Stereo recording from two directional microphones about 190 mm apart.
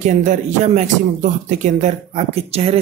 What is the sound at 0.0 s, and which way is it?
Speech, 40° right (ahead or behind).